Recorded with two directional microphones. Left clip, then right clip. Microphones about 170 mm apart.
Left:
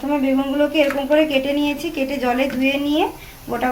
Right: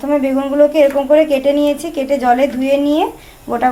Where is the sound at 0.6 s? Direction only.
30° right (ahead or behind).